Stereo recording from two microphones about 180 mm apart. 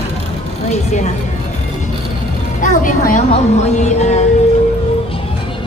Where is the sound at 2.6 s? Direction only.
45° left (ahead or behind).